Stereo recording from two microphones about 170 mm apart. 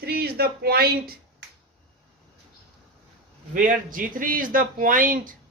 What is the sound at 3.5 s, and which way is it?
Speech, 55° right (ahead or behind).